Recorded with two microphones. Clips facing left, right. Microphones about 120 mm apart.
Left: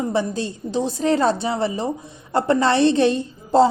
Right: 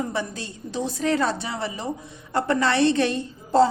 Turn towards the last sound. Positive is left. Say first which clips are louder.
# left 3 dB
turn(degrees=25)  # may be behind; listen again after turning